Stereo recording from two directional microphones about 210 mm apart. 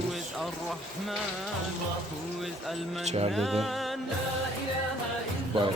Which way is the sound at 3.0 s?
30° right (ahead or behind).